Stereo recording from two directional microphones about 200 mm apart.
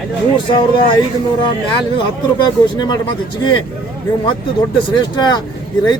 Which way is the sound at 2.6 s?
20° left (ahead or behind).